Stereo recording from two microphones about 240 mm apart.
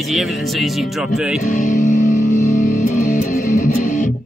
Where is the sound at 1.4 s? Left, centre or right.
Left.